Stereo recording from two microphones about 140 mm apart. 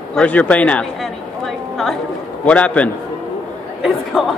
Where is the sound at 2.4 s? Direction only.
10° left (ahead or behind).